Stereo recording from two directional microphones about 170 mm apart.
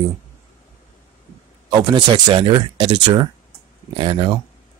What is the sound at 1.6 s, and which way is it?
Speech, 25° right (ahead or behind).